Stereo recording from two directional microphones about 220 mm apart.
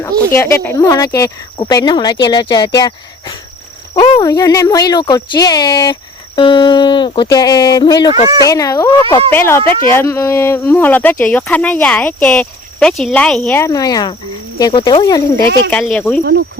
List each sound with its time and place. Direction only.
0.3 s speech: 10° left (ahead or behind)
15.7 s speech: 5° left (ahead or behind)
16.2 s speech: 50° right (ahead or behind)